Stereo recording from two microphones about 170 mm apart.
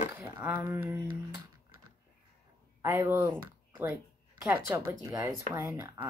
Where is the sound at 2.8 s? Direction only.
15° right (ahead or behind).